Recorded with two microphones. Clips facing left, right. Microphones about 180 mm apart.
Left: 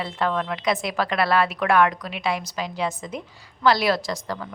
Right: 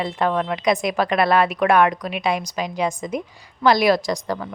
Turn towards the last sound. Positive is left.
turn(degrees=-15)  # may be behind; listen again after turning